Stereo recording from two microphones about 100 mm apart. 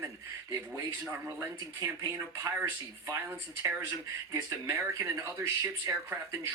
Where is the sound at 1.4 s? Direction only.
30° right (ahead or behind).